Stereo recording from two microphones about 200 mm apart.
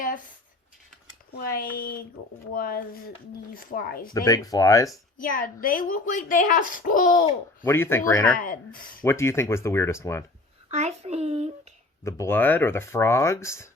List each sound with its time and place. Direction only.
1.4 s speech: 50° left (ahead or behind)
4.1 s speech: 15° left (ahead or behind)
5.2 s speech: 45° left (ahead or behind)
7.6 s speech: 10° left (ahead or behind)
8.4 s speech: 45° left (ahead or behind)
9.0 s speech: 15° left (ahead or behind)
10.7 s a child's voice: 35° right (ahead or behind)
12.0 s speech: 15° left (ahead or behind)